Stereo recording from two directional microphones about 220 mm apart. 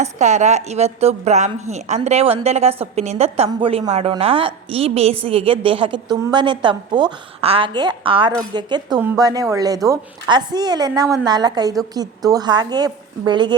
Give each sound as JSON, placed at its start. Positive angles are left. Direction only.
{"t": 0.0, "sound": "a woman's voice", "side_deg": -30}